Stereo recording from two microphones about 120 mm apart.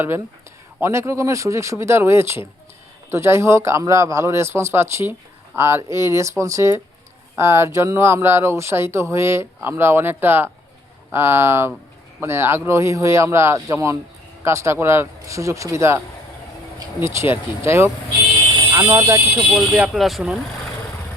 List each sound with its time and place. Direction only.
0.8 s speech: 20° right (ahead or behind)
19.4 s speech: 10° right (ahead or behind)